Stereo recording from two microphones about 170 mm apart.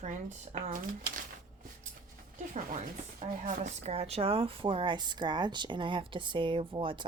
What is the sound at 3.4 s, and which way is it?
A woman's voice, 40° right (ahead or behind).